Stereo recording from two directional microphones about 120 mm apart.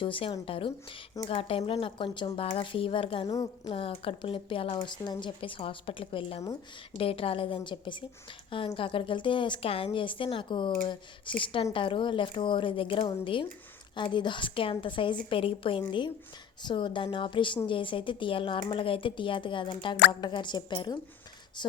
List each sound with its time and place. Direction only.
0.0 s a woman's voice: 45° left (ahead or behind)